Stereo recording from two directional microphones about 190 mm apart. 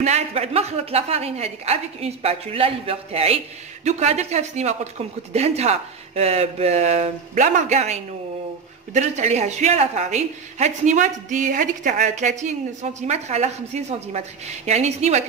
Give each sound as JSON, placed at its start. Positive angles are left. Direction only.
{"t": 0.0, "sound": "a woman's voice", "side_deg": -35}